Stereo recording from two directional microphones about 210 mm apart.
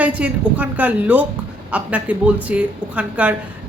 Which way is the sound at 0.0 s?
5° right (ahead or behind).